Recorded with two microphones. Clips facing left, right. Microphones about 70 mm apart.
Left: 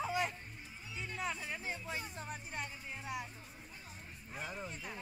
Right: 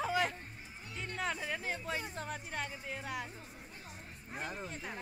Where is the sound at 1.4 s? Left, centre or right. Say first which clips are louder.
Right 4 dB; right.